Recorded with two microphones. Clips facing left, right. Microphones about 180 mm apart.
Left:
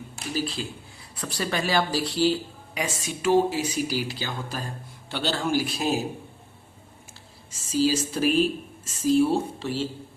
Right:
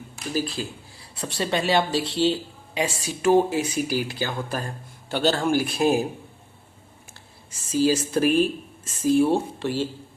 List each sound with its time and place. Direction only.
0.3 s speech: 45° right (ahead or behind)
0.9 s speech: 30° right (ahead or behind)
3.2 s speech: 50° right (ahead or behind)
7.5 s speech: 55° right (ahead or behind)